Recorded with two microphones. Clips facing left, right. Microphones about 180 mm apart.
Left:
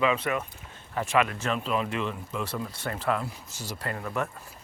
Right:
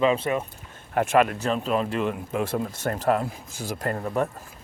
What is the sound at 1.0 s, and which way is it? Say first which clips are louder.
Speech: right 5 dB; 50° right (ahead or behind).